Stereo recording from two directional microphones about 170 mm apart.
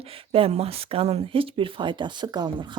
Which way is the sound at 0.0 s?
35° right (ahead or behind).